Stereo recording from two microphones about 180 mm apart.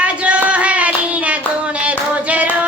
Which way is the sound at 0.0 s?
5° right (ahead or behind).